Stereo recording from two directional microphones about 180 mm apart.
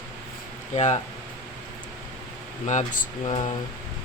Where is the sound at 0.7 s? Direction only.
40° left (ahead or behind).